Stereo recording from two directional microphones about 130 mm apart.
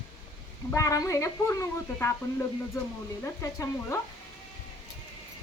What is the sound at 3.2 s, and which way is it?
Speech, 25° left (ahead or behind).